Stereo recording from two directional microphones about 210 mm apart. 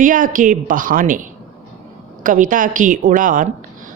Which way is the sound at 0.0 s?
40° right (ahead or behind).